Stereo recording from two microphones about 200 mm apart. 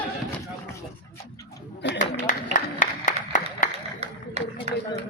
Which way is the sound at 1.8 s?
60° left (ahead or behind).